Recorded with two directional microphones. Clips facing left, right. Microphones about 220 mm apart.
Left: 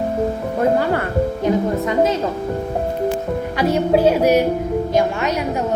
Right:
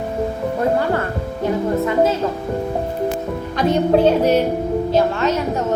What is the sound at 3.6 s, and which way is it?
Speech, 10° left (ahead or behind).